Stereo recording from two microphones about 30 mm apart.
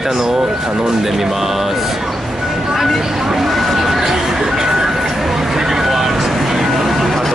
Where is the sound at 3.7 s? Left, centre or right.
Centre.